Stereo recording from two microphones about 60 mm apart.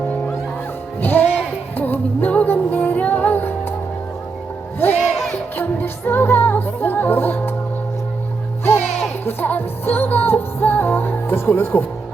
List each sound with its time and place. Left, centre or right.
1.0 s music: left
4.9 s music: centre
5.5 s music: left
9.2 s music: left